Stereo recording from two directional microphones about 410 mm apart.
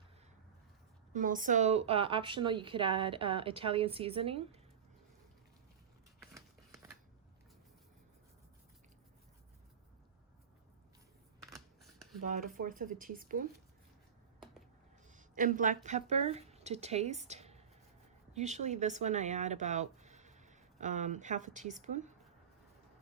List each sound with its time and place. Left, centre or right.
1.1 s a woman's voice: centre
6.3 s scissors: centre
12.2 s speech: centre
15.0 s speech: centre